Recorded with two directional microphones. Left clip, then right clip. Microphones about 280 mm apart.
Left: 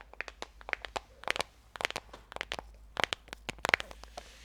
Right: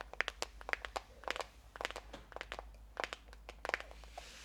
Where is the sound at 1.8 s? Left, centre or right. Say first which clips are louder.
Left 7 dB; left.